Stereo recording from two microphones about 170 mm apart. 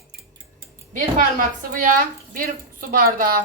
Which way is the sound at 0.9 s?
50° right (ahead or behind).